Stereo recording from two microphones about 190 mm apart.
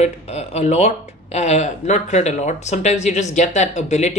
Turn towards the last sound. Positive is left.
turn(degrees=35)  # may be behind; listen again after turning